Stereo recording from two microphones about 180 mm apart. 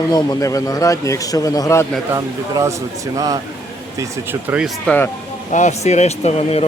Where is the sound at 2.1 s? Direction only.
20° right (ahead or behind).